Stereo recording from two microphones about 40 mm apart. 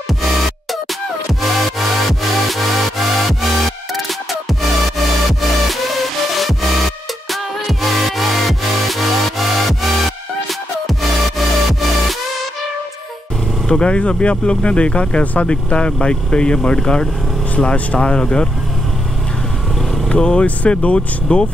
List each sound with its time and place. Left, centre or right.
1.4 s music: centre
13.7 s speech: left
20.1 s speech: left
20.4 s speech: left